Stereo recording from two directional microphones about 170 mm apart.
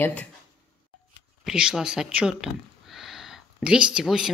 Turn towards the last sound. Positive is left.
turn(degrees=-5)  # may be behind; listen again after turning